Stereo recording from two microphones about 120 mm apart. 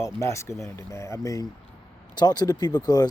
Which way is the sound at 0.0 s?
25° left (ahead or behind).